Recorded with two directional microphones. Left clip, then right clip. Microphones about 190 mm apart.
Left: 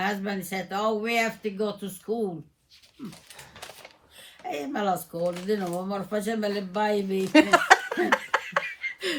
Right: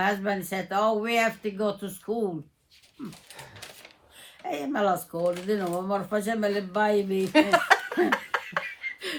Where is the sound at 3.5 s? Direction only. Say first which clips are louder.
Left 2 dB; 25° left (ahead or behind).